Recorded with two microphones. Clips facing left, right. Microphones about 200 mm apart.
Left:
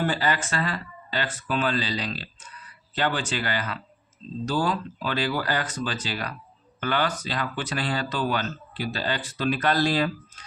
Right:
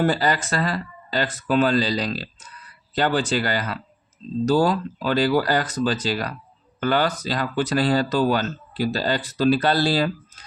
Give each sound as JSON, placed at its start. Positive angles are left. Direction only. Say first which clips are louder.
{"t": 0.0, "sound": "speech", "louder": "right 5 dB", "side_deg": -40}